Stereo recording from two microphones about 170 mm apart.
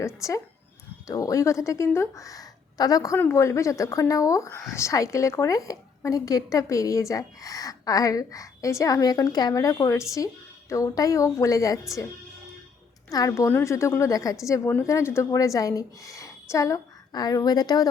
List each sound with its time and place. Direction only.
0.0 s a woman's voice: 20° left (ahead or behind)
13.1 s a woman's voice: 20° left (ahead or behind)